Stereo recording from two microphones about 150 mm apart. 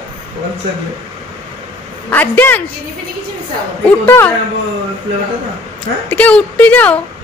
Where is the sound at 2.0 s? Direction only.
15° left (ahead or behind).